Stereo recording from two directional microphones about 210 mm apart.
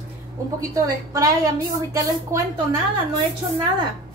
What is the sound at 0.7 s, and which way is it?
A woman's voice, 15° right (ahead or behind).